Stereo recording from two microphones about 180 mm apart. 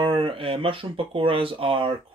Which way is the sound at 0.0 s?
30° right (ahead or behind).